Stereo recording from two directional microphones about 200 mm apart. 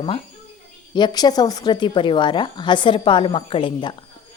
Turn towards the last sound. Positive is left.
turn(degrees=25)  # may be behind; listen again after turning